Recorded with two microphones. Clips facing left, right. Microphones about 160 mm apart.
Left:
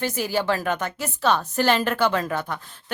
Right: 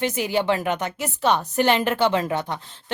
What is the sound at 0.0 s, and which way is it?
A woman's voice, 20° right (ahead or behind).